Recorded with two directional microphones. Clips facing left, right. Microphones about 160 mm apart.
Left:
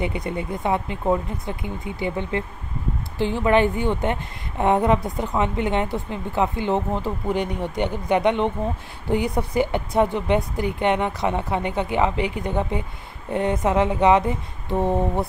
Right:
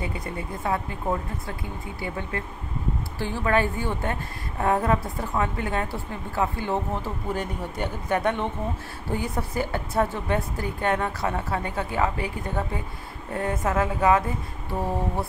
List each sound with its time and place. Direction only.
0.0 s a woman's voice: 20° left (ahead or behind)